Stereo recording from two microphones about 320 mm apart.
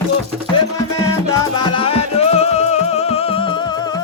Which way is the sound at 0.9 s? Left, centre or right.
Centre.